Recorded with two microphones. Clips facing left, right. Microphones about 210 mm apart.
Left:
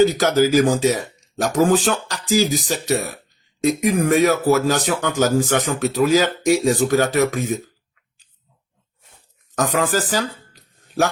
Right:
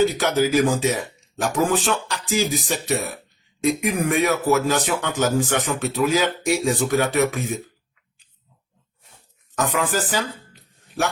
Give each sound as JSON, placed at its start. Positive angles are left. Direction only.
{"t": 0.2, "sound": "speech", "side_deg": 40}
{"t": 9.6, "sound": "speech", "side_deg": 35}